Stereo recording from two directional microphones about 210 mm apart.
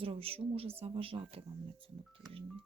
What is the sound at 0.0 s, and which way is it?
Speech, 25° right (ahead or behind).